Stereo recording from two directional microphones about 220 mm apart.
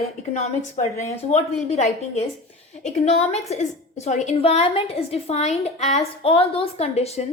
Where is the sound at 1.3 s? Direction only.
30° left (ahead or behind).